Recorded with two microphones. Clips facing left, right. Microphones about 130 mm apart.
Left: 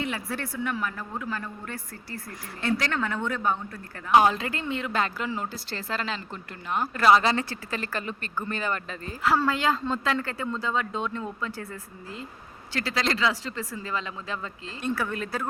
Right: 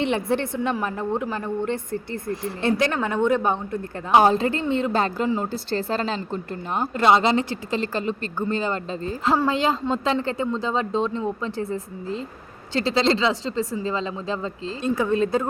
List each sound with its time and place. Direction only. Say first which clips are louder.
0.0 s a woman's voice: right 9 dB; 25° right (ahead or behind)
6.9 s a woman's voice: right 2 dB; 25° right (ahead or behind)